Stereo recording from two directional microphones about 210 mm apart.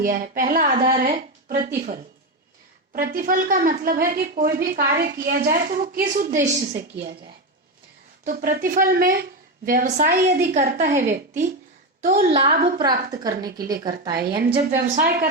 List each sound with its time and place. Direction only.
0.0 s speech: 40° right (ahead or behind)
8.2 s speech: 40° right (ahead or behind)
12.8 s a woman's voice: 20° right (ahead or behind)
14.9 s speech: 40° right (ahead or behind)